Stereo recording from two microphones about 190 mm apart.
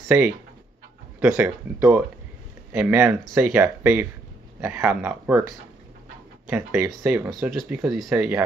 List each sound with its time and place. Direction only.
0.1 s speech: 10° right (ahead or behind)
6.5 s speech: 10° right (ahead or behind)
7.3 s speech: 5° right (ahead or behind)